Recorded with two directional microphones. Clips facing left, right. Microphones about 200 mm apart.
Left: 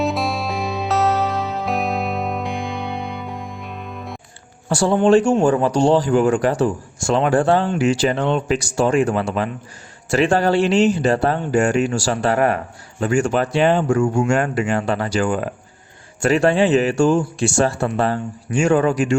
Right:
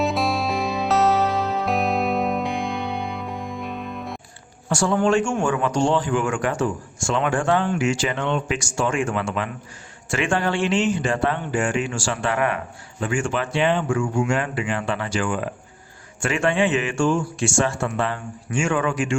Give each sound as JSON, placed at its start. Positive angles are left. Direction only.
{"t": 0.0, "sound": "music", "side_deg": 0}
{"t": 4.7, "sound": "speech", "side_deg": 35}